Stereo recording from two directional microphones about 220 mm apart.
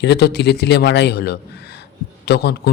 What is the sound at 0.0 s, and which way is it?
A man's voice, 50° left (ahead or behind).